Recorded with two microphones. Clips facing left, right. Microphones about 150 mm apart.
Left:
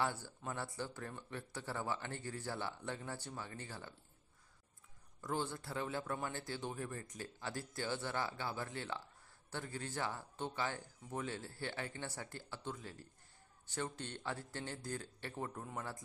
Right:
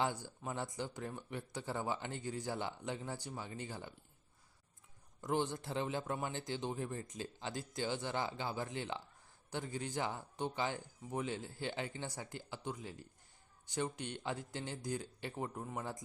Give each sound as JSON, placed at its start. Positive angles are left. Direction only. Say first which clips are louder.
{"t": 0.0, "sound": "speech", "louder": "right 2 dB", "side_deg": -15}
{"t": 5.2, "sound": "speech", "louder": "right 4 dB", "side_deg": -20}